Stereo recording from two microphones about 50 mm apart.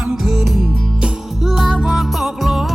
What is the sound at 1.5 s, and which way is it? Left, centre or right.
Music, centre.